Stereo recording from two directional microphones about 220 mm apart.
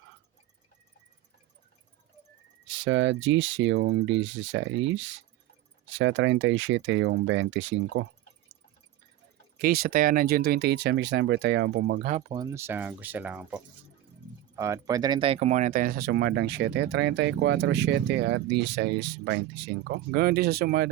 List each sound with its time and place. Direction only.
2.6 s speech: 55° right (ahead or behind)
9.6 s speech: 45° right (ahead or behind)
12.3 s speech: 15° right (ahead or behind); by 20.9 s 45° right (ahead or behind)